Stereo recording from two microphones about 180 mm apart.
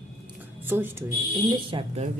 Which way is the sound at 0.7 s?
10° right (ahead or behind).